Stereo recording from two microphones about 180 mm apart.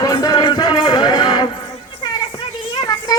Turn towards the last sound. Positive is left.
turn(degrees=20)  # may be behind; listen again after turning